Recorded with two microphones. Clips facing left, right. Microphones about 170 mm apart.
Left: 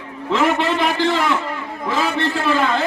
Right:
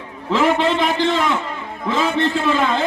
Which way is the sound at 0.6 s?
20° right (ahead or behind).